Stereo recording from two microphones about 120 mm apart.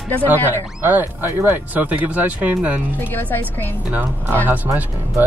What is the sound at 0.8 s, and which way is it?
Speech, 15° right (ahead or behind).